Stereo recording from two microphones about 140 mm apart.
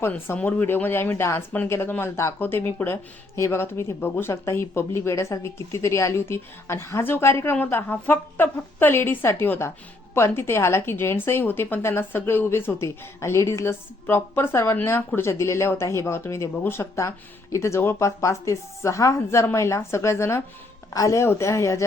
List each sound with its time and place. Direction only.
0.0 s a woman's voice: 15° left (ahead or behind)